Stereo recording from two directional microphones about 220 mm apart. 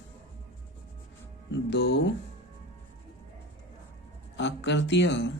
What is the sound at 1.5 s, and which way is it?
Speech, 50° left (ahead or behind).